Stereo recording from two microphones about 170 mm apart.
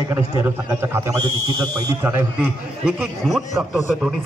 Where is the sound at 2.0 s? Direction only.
10° right (ahead or behind).